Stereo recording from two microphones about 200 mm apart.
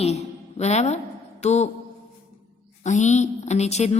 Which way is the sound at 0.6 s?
35° left (ahead or behind).